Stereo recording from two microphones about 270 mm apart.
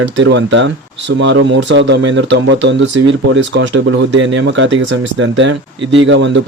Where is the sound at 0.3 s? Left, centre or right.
Right.